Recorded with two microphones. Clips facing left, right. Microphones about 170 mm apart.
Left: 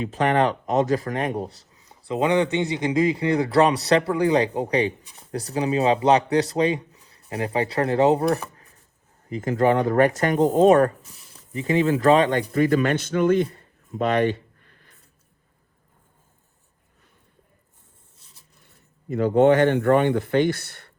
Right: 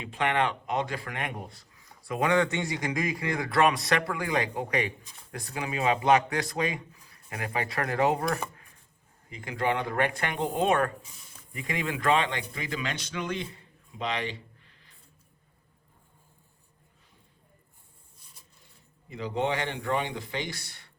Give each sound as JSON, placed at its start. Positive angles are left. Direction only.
{"t": 0.0, "sound": "speech", "side_deg": 40}
{"t": 1.7, "sound": "a man's voice", "side_deg": 25}
{"t": 9.3, "sound": "speech", "side_deg": 45}
{"t": 11.5, "sound": "speech", "side_deg": 25}
{"t": 18.2, "sound": "speech", "side_deg": 60}